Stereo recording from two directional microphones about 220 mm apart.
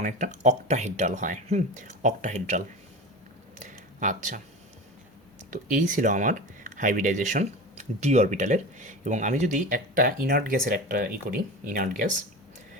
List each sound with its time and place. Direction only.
0.0 s speech: 35° right (ahead or behind)
3.6 s a sound: 35° right (ahead or behind)
5.5 s speech: 35° right (ahead or behind)